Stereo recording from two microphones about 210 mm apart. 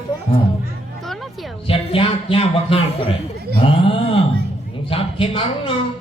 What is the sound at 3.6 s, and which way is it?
Speech, 25° left (ahead or behind).